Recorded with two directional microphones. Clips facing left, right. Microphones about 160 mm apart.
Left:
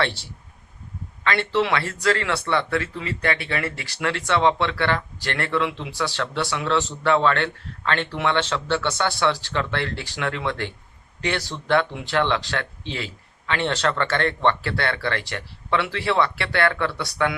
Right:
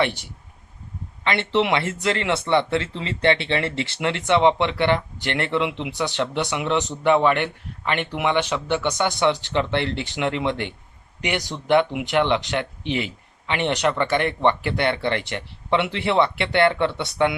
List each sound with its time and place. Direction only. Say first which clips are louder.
0.0 s speech: right 2 dB; 15° right (ahead or behind)